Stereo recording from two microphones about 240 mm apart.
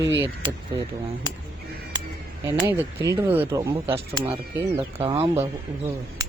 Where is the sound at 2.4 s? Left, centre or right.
Centre.